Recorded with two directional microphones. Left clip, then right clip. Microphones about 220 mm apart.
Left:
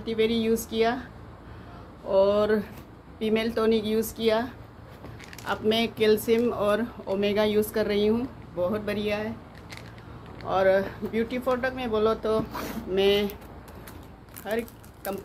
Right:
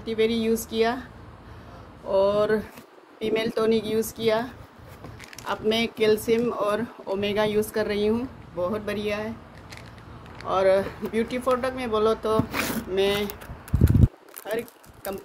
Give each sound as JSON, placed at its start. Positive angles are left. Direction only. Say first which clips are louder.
{"t": 0.0, "sound": "speech", "louder": "right 1 dB", "side_deg": -10}
{"t": 2.0, "sound": "speech", "louder": "even", "side_deg": -10}
{"t": 10.4, "sound": "speech", "louder": "right 1 dB", "side_deg": -20}
{"t": 14.5, "sound": "speech", "louder": "even", "side_deg": -10}